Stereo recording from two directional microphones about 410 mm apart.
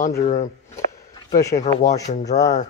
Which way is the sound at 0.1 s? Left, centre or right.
Centre.